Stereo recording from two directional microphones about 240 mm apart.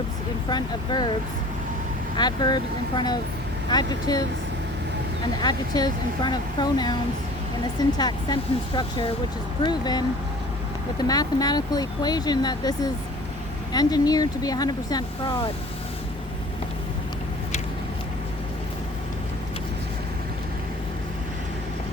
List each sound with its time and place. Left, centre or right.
0.5 s speech: centre
2.1 s speech: centre
5.4 s speech: centre
11.0 s speech: centre